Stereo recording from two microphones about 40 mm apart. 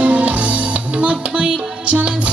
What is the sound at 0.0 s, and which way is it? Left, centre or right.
Music, right.